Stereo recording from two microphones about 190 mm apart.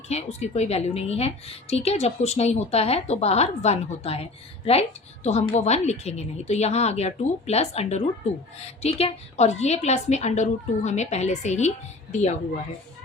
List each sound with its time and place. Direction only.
0.1 s a woman's voice: 35° left (ahead or behind)